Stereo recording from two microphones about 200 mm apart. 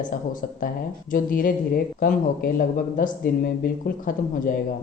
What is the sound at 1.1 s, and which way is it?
Speech, 45° left (ahead or behind).